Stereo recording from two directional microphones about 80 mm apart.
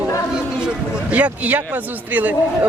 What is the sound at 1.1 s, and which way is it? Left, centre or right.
Speech, centre.